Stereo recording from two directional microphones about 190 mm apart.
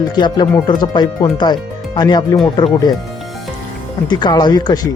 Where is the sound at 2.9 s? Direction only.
Centre (ahead or behind).